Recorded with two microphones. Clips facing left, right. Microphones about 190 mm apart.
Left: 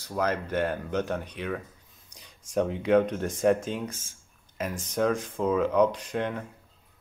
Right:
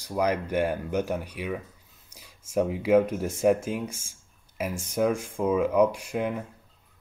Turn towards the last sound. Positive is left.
turn(degrees=-10)  # may be behind; listen again after turning